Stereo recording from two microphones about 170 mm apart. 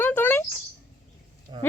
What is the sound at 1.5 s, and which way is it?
Speech, 30° right (ahead or behind).